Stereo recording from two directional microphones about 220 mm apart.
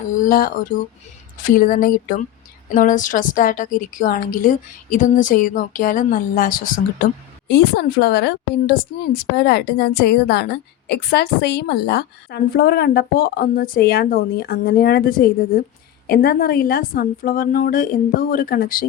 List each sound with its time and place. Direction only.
0.2 s a woman's voice: 40° left (ahead or behind)